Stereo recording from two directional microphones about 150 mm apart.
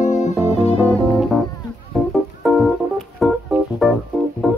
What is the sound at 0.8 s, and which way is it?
Music, 5° left (ahead or behind).